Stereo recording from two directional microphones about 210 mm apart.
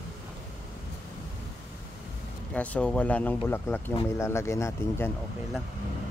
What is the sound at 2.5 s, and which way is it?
Speech, 5° left (ahead or behind).